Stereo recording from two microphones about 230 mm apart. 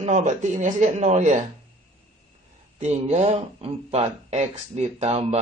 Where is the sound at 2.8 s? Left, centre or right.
Right.